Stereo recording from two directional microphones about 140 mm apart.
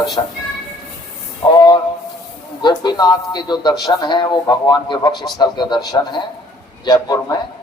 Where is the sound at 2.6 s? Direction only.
30° left (ahead or behind).